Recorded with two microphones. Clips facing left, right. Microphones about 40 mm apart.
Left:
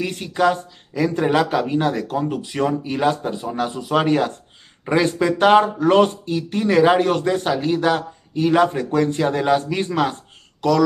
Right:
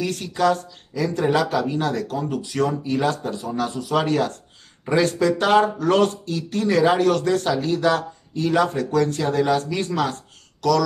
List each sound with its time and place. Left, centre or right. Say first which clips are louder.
0.0 s speech: left 2 dB; left